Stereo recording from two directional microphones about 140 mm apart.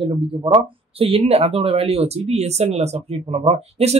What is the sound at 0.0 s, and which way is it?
Speech, 40° right (ahead or behind).